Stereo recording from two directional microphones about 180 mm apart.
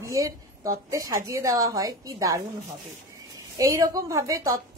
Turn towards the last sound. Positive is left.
turn(degrees=-15)  # may be behind; listen again after turning